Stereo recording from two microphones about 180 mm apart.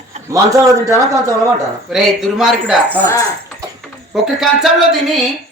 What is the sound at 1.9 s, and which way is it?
Speech, centre (ahead or behind).